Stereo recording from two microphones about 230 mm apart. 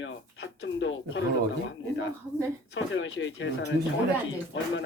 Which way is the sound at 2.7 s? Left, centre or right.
Left.